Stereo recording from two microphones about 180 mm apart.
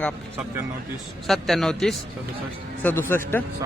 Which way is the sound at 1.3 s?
Centre (ahead or behind).